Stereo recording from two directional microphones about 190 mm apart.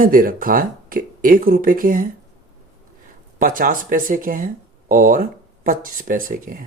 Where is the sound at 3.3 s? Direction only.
45° right (ahead or behind).